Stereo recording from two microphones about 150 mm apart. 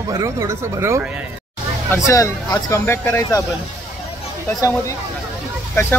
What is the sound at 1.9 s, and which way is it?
Speech, 20° left (ahead or behind).